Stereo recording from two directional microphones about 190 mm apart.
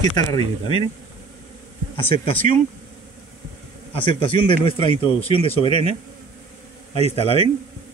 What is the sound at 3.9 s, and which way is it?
Speech, 25° left (ahead or behind).